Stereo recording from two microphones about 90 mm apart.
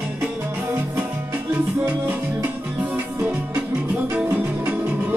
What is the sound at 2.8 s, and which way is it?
Music, 15° right (ahead or behind).